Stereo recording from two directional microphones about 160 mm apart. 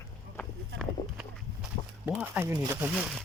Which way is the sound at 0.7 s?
5° right (ahead or behind).